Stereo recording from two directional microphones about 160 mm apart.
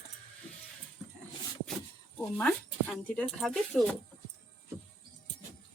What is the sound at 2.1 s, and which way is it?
Speech, 10° left (ahead or behind).